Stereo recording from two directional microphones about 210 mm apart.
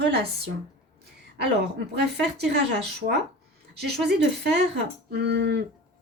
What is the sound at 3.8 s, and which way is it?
Speech, 50° right (ahead or behind).